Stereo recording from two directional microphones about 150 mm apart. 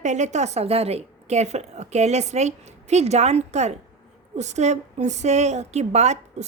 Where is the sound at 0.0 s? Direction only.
50° right (ahead or behind).